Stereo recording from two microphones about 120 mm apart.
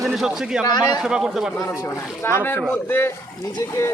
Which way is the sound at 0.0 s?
Centre (ahead or behind).